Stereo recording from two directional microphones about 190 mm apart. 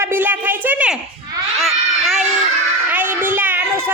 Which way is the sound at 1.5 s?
Centre (ahead or behind).